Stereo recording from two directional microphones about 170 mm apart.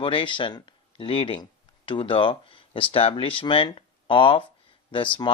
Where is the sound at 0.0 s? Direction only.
30° left (ahead or behind).